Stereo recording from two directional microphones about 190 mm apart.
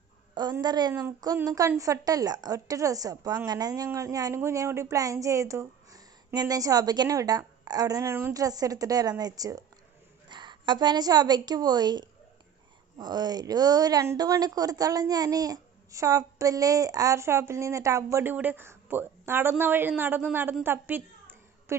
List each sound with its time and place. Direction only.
0.3 s a woman's voice: 20° right (ahead or behind)